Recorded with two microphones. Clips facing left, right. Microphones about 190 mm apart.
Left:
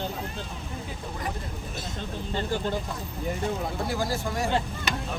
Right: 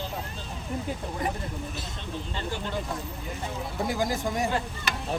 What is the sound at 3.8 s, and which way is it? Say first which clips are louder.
Speech: right 4 dB; 15° right (ahead or behind).